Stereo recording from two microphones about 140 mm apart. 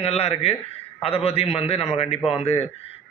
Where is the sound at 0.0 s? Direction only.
50° left (ahead or behind).